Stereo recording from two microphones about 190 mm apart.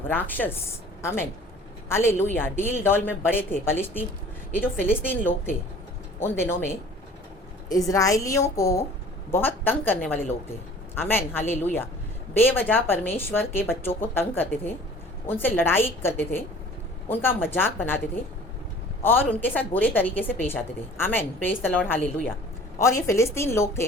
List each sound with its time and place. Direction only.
0.1 s a woman's voice: 10° left (ahead or behind)
19.0 s a woman's voice: 10° left (ahead or behind)